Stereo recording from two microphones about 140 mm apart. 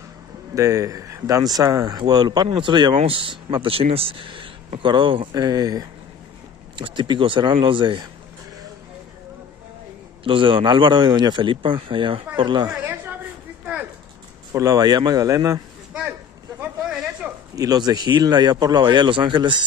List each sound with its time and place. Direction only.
0.6 s speech: 25° right (ahead or behind)
10.2 s speech: 40° right (ahead or behind)
12.7 s a sound: 15° right (ahead or behind)
14.5 s speech: 25° right (ahead or behind)
15.9 s a sound: 10° right (ahead or behind)
17.6 s speech: 30° right (ahead or behind)